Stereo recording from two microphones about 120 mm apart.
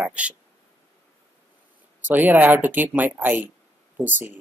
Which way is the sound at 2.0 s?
15° right (ahead or behind).